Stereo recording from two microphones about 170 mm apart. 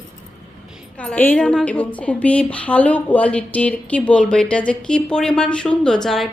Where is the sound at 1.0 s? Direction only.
10° left (ahead or behind).